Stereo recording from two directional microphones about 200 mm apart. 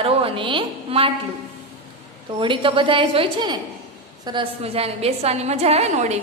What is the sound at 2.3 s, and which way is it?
A woman's voice, 25° right (ahead or behind).